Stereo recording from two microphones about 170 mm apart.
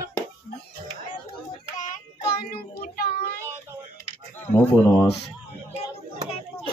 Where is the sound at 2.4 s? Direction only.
60° left (ahead or behind).